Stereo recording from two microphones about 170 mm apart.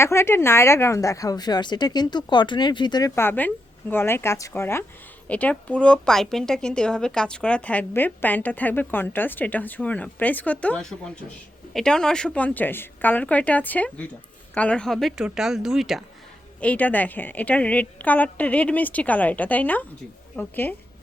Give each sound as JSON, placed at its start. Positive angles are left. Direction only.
{"t": 0.0, "sound": "a woman's voice", "side_deg": 15}
{"t": 3.2, "sound": "a woman's voice", "side_deg": 10}